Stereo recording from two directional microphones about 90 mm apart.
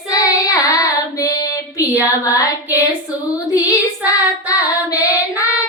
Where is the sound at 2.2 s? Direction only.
35° left (ahead or behind).